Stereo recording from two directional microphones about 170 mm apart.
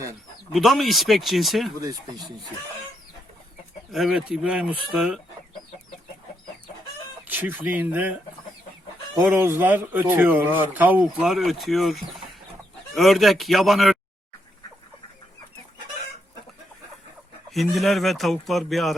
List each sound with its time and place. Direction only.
0.5 s speech: centre (ahead or behind)
1.8 s speech: 20° right (ahead or behind)
3.9 s speech: 5° right (ahead or behind)
7.3 s speech: 10° right (ahead or behind)
9.1 s speech: 10° right (ahead or behind)
17.5 s speech: centre (ahead or behind)